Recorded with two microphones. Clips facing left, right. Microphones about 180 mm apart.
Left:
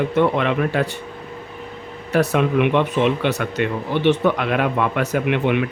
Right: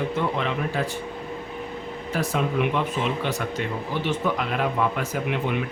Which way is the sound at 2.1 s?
70° left (ahead or behind).